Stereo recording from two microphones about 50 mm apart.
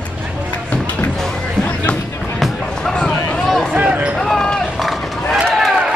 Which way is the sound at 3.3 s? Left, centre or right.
Centre.